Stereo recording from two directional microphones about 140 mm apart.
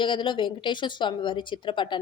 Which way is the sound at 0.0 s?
35° left (ahead or behind).